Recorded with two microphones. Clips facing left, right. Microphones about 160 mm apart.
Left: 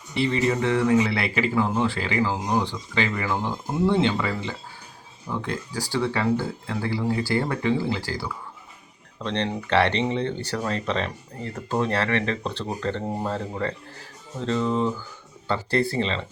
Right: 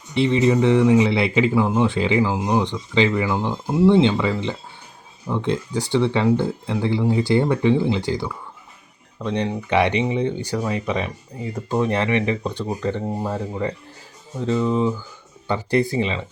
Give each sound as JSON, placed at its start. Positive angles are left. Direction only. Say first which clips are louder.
{"t": 0.2, "sound": "speech", "louder": "right 6 dB", "side_deg": -20}